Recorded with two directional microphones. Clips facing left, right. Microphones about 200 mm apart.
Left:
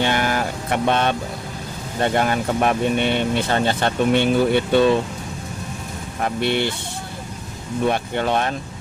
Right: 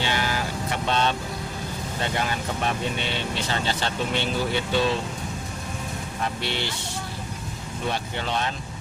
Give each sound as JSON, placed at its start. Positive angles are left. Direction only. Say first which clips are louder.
{"t": 0.0, "sound": "vehicle", "louder": "left 6 dB", "side_deg": 55}
{"t": 2.0, "sound": "speech", "louder": "left 9 dB", "side_deg": 55}
{"t": 6.2, "sound": "speech", "louder": "left 9 dB", "side_deg": 55}
{"t": 7.9, "sound": "speech", "louder": "left 7 dB", "side_deg": 55}